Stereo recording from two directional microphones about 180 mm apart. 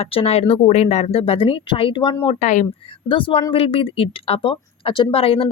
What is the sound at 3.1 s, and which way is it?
A woman's voice, 30° left (ahead or behind).